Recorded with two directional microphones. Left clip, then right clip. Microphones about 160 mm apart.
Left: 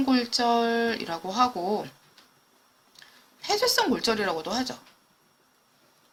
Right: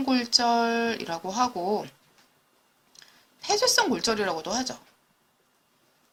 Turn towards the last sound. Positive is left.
turn(degrees=-25)  # may be behind; listen again after turning